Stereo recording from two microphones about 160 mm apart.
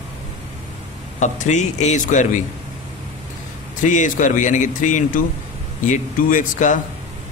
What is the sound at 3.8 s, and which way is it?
Speech, 50° left (ahead or behind).